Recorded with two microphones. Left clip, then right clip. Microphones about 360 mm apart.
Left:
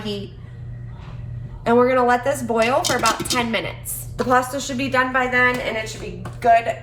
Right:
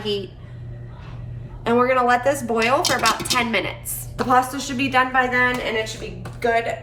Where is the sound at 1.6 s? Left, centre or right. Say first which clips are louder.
Left 2 dB; centre.